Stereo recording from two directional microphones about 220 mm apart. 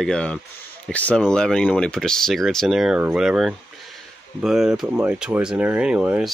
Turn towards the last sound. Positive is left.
turn(degrees=-5)  # may be behind; listen again after turning